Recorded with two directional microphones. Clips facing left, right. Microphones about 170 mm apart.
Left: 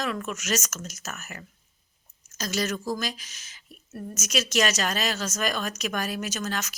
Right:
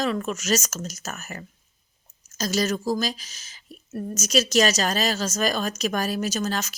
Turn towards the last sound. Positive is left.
turn(degrees=-30)  # may be behind; listen again after turning